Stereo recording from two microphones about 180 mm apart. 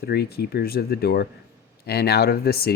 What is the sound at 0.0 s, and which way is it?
Speech, 60° left (ahead or behind).